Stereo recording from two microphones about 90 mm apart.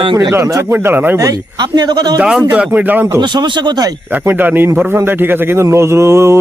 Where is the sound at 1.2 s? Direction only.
45° right (ahead or behind).